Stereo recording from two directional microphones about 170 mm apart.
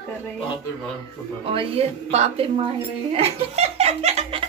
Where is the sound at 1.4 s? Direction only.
35° right (ahead or behind).